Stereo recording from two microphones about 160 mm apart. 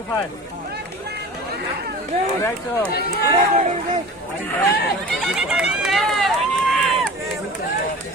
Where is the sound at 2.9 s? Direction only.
80° left.